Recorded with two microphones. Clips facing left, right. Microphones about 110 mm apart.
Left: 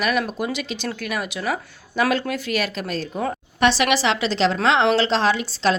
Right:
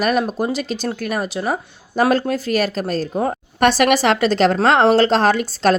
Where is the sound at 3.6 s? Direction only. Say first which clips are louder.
Right 4 dB; 50° right (ahead or behind).